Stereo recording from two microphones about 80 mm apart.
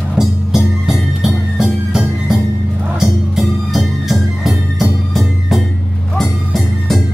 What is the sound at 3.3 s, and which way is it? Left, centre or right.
Music, centre.